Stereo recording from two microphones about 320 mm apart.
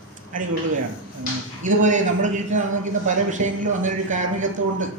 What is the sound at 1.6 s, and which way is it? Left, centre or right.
Speech, right.